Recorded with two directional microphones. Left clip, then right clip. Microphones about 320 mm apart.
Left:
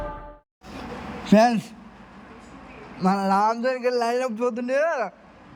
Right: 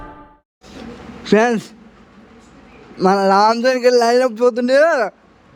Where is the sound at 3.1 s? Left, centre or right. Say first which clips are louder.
Right 8 dB; centre.